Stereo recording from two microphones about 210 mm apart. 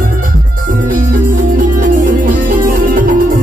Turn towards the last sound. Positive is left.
turn(degrees=-40)  # may be behind; listen again after turning